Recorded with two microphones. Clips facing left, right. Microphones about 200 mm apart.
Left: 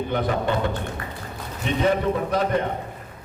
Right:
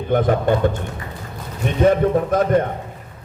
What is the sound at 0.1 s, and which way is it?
Speech, 45° right (ahead or behind).